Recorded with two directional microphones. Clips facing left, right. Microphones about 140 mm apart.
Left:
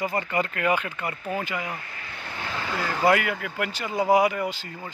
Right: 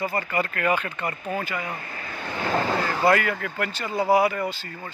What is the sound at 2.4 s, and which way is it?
Vehicle, 45° right (ahead or behind).